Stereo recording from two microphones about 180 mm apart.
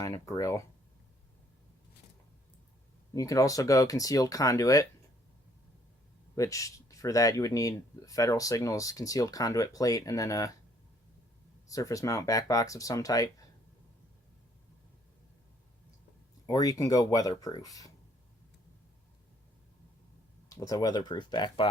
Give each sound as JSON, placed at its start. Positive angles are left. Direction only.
{"t": 0.0, "sound": "speech", "side_deg": 20}
{"t": 3.2, "sound": "speech", "side_deg": 20}
{"t": 6.3, "sound": "speech", "side_deg": 15}
{"t": 11.7, "sound": "speech", "side_deg": 20}
{"t": 16.5, "sound": "speech", "side_deg": 20}
{"t": 20.5, "sound": "speech", "side_deg": 20}